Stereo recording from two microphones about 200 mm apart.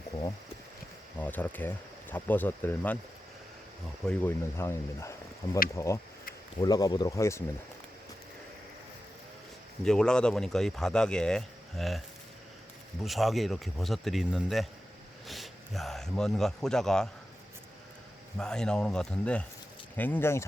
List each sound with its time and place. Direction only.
1.2 s speech: 10° left (ahead or behind)
4.0 s speech: 5° left (ahead or behind)
9.8 s speech: 5° left (ahead or behind)
18.3 s speech: 5° left (ahead or behind)